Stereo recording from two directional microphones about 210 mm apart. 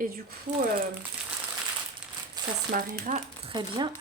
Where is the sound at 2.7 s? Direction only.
40° right (ahead or behind).